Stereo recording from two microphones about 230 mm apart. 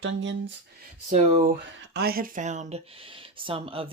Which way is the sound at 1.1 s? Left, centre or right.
Right.